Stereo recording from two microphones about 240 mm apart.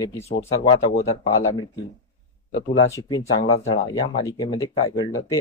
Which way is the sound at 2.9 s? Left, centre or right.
Centre.